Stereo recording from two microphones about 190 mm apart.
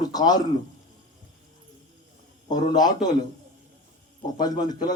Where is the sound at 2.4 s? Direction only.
40° left (ahead or behind).